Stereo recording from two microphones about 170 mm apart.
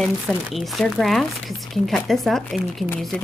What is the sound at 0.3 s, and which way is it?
Speech, centre (ahead or behind).